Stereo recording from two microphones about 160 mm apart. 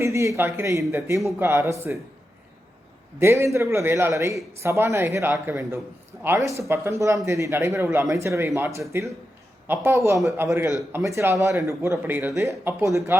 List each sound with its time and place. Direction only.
0.0 s a man's voice: 20° right (ahead or behind)
3.2 s a man's voice: 15° right (ahead or behind)